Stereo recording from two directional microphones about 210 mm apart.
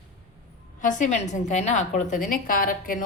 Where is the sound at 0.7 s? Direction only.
35° left (ahead or behind).